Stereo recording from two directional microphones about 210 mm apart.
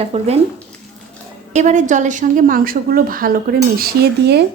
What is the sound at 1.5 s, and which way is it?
A woman's voice, 35° right (ahead or behind).